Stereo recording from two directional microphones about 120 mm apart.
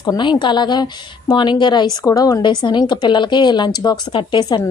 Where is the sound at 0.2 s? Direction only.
40° left (ahead or behind).